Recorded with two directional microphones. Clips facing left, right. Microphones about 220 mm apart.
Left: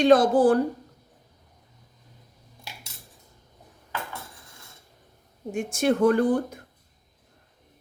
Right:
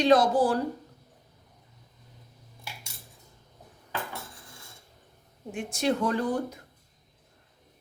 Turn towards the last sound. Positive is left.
turn(degrees=55)  # may be behind; listen again after turning